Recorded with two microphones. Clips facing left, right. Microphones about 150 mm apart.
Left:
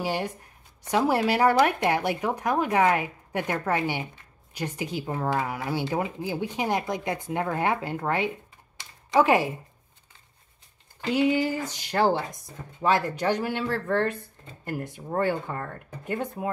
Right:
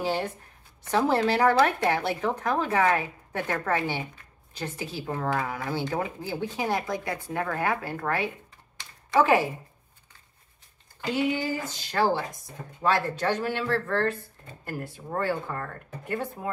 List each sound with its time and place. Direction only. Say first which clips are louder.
0.0 s speech: even; 10° left (ahead or behind)
8.7 s typing: left 1 dB; 20° left (ahead or behind)
11.4 s speech: left 2 dB; 15° left (ahead or behind)